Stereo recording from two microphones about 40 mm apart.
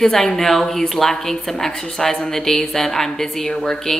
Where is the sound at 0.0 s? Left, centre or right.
Centre.